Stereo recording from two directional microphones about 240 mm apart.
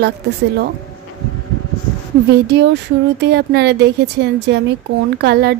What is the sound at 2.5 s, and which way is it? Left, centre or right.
Speech, right.